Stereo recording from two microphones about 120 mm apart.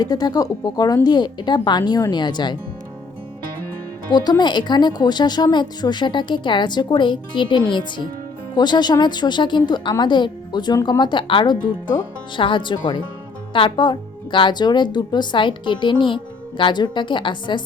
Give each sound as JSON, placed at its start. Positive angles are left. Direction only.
{"t": 0.0, "sound": "a woman's voice", "side_deg": 35}
{"t": 4.1, "sound": "a woman's voice", "side_deg": 35}